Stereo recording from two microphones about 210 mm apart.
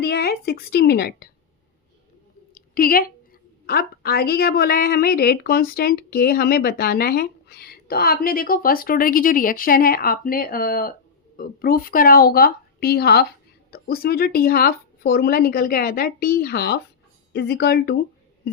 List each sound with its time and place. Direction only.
0.0 s a woman's voice: 50° left (ahead or behind)
2.6 s a sound: 45° left (ahead or behind)
3.7 s a woman's voice: 45° left (ahead or behind)